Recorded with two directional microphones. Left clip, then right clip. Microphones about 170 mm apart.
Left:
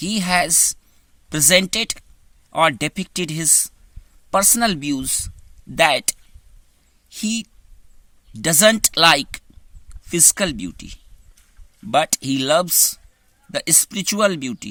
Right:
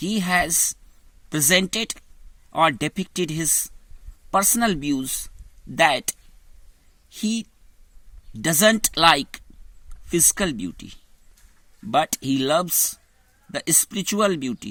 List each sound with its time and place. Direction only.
0.0 s speech: 15° left (ahead or behind)